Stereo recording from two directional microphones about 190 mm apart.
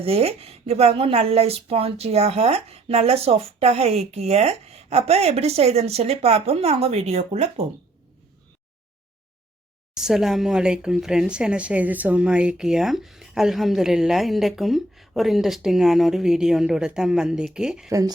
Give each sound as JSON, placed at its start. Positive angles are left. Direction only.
{"t": 0.0, "sound": "speech", "side_deg": -30}
{"t": 9.9, "sound": "speech", "side_deg": 0}
{"t": 17.8, "sound": "speech", "side_deg": -15}